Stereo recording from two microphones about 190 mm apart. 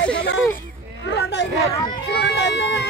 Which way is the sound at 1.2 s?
70° left (ahead or behind).